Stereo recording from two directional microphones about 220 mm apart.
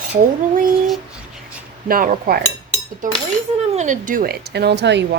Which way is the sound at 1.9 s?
40° right (ahead or behind).